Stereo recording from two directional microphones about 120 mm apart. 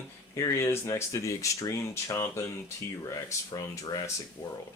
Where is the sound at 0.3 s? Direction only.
25° left (ahead or behind).